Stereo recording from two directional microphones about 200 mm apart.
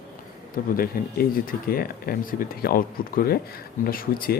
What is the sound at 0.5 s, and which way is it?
Speech, 45° left (ahead or behind).